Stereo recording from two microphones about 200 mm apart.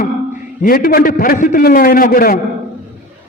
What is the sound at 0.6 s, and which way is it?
A man's voice, 45° left (ahead or behind).